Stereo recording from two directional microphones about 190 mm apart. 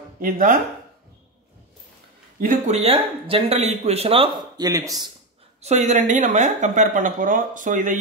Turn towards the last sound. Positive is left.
turn(degrees=-45)  # may be behind; listen again after turning